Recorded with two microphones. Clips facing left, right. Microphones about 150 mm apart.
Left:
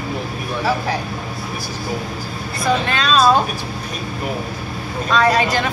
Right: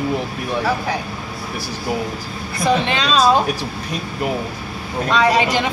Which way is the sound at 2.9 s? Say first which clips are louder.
Even; 20° right (ahead or behind).